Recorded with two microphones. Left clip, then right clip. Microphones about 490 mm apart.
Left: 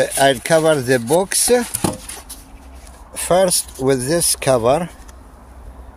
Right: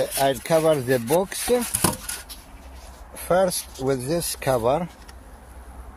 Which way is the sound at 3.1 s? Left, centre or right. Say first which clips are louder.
Left 6 dB; right.